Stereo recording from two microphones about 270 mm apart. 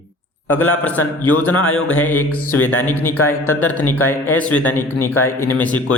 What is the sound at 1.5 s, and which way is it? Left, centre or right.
Speech, left.